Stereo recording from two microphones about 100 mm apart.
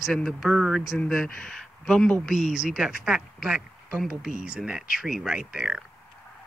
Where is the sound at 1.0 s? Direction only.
10° left (ahead or behind).